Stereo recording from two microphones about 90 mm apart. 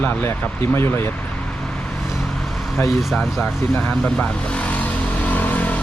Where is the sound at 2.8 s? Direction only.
Centre (ahead or behind).